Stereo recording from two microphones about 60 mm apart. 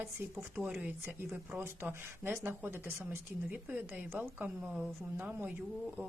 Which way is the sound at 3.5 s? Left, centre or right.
Right.